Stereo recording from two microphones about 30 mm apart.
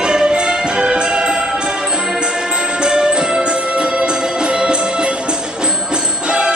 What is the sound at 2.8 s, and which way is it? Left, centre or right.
Music, right.